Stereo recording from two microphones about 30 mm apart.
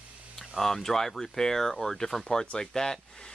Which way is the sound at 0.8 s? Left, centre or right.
Centre.